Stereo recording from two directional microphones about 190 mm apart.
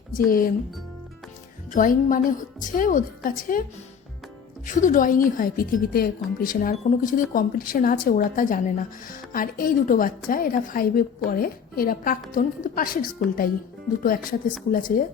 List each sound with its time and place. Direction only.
0.3 s speech: 50° left (ahead or behind)
1.7 s speech: 45° left (ahead or behind)
4.6 s speech: 45° left (ahead or behind)